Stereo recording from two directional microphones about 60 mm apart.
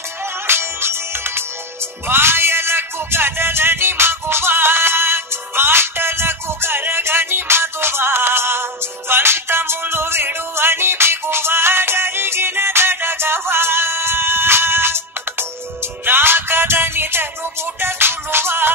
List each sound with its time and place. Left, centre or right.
0.5 s music: right